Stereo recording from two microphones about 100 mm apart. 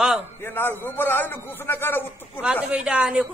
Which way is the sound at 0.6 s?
20° left (ahead or behind).